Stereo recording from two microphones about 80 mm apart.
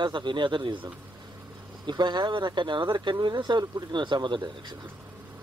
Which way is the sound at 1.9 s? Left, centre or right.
Right.